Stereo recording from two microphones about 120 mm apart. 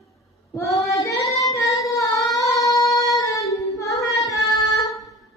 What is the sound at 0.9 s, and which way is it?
Singing, 25° left (ahead or behind).